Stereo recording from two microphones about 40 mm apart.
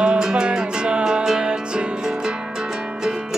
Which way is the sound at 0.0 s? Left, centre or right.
Right.